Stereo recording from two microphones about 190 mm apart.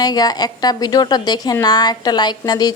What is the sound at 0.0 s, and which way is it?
A woman's voice, 20° left (ahead or behind).